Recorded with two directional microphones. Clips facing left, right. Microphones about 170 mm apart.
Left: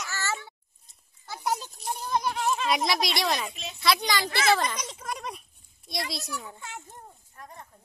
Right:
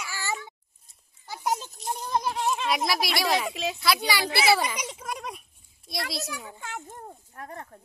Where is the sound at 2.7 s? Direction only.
5° right (ahead or behind).